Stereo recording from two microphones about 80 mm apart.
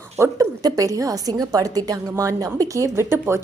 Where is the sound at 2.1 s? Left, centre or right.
Right.